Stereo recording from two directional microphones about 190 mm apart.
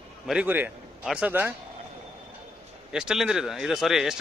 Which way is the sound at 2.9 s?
5° right (ahead or behind).